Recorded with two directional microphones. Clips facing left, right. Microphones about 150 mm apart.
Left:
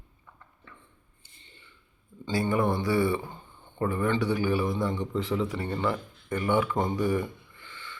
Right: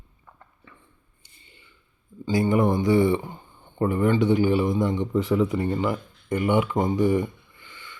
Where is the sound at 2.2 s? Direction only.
15° right (ahead or behind).